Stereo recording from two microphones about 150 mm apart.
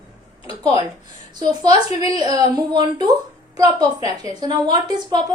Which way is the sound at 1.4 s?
25° right (ahead or behind).